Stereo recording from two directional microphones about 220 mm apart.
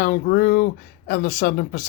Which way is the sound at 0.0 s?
45° left (ahead or behind).